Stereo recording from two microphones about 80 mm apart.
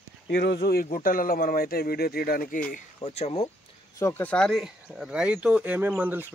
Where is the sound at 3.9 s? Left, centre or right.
Left.